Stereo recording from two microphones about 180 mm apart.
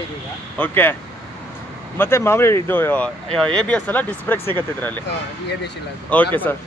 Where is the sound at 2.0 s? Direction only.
15° left (ahead or behind).